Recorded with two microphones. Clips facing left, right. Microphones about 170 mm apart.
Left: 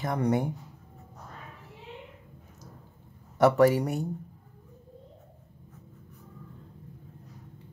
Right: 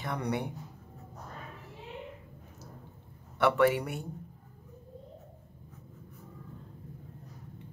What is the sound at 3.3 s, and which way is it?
Speech, 40° left (ahead or behind).